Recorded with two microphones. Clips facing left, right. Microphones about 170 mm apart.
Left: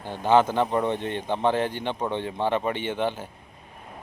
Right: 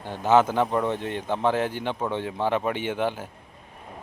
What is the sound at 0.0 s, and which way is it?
Speech, 5° right (ahead or behind).